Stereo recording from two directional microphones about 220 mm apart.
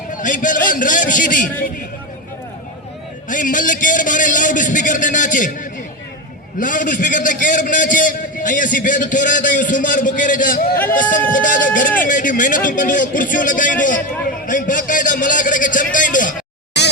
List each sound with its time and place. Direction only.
0.1 s a man's voice: 35° left (ahead or behind)
3.2 s a man's voice: 35° left (ahead or behind)
16.8 s music: 50° left (ahead or behind)